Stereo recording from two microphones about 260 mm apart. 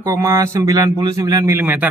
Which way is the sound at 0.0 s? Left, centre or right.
Centre.